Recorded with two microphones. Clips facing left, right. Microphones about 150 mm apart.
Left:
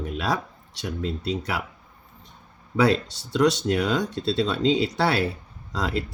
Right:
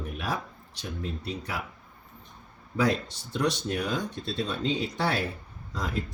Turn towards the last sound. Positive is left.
turn(degrees=85)